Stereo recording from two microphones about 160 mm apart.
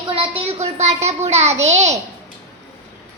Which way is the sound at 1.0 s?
40° right (ahead or behind).